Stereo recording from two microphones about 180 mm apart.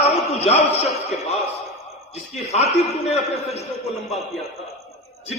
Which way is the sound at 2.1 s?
40° left (ahead or behind).